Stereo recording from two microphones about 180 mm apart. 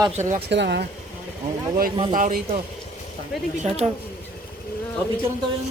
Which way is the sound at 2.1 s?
50° right (ahead or behind).